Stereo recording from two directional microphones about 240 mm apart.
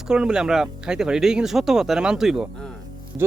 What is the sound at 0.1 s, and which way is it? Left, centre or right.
Speech, centre.